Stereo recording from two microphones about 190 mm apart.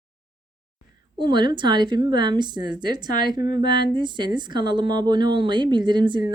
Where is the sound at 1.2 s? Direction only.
25° right (ahead or behind).